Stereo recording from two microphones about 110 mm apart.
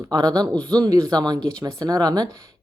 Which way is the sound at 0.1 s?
35° right (ahead or behind).